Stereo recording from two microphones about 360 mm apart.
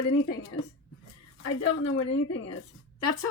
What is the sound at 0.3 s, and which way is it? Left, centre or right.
A woman's voice, left.